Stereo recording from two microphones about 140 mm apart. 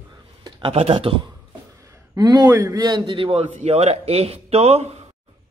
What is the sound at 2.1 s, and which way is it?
A man's voice, 30° right (ahead or behind).